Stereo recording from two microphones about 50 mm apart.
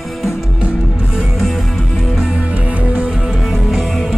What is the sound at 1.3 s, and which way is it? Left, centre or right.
Music, centre.